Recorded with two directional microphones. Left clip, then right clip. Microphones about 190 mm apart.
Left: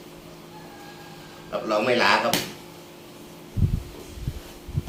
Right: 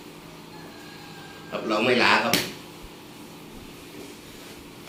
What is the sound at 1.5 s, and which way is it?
Speech, 20° left (ahead or behind).